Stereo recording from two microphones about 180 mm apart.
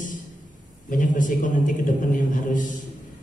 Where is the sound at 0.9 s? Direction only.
45° left (ahead or behind).